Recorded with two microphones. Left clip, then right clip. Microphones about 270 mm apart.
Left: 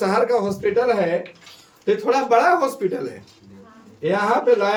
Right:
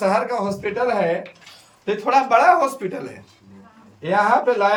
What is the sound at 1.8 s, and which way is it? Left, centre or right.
A man's voice, centre.